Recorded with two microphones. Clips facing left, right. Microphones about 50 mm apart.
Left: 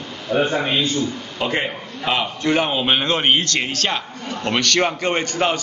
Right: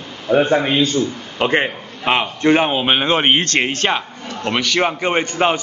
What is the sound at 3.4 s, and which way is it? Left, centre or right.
Speech, right.